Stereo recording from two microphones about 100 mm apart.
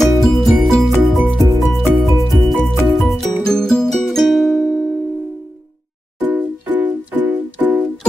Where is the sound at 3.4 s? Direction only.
5° left (ahead or behind).